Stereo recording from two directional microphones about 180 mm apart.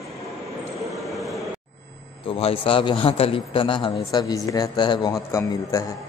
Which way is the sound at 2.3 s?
30° left (ahead or behind).